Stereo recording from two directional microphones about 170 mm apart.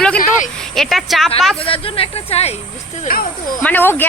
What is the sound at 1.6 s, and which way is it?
Speech, 35° left (ahead or behind).